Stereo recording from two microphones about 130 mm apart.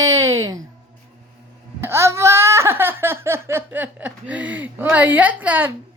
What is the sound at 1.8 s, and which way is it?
Speech, 20° right (ahead or behind).